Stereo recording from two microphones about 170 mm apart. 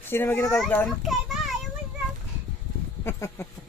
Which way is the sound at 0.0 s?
15° left (ahead or behind).